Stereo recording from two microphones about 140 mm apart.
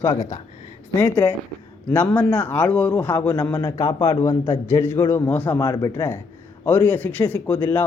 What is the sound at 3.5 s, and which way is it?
Speech, 30° left (ahead or behind).